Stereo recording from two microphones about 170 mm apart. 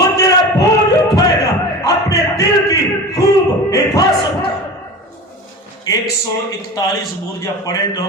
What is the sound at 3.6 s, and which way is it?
Speech, 20° left (ahead or behind).